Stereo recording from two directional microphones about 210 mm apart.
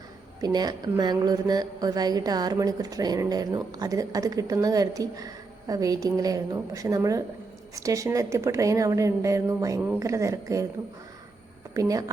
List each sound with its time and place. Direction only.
0.4 s a woman's voice: 20° right (ahead or behind)
11.7 s a woman's voice: 15° right (ahead or behind)